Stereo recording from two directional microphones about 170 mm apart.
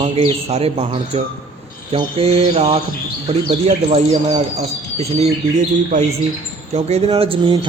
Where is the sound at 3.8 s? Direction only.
35° right (ahead or behind).